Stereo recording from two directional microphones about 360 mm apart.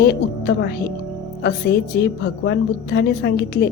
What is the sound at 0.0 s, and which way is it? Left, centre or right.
A woman's voice, left.